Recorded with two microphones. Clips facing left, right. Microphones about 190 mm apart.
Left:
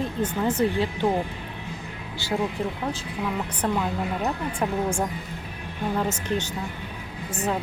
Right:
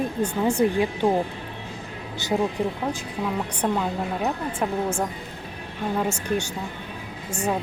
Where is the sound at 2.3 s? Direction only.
15° right (ahead or behind).